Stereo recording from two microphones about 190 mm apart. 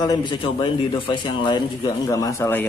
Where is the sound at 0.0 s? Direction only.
20° left (ahead or behind).